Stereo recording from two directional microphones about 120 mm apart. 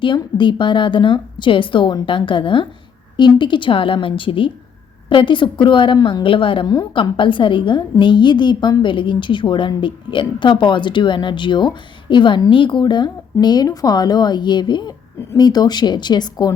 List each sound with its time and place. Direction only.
0.0 s a woman's voice: 40° left (ahead or behind)